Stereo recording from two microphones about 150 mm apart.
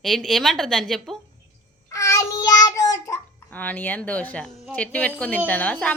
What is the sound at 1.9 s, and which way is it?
Child singing, 20° left (ahead or behind).